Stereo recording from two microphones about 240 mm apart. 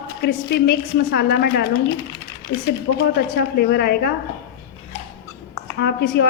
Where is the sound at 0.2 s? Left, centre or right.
Left.